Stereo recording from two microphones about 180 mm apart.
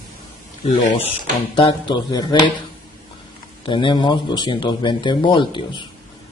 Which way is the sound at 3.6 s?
25° left (ahead or behind).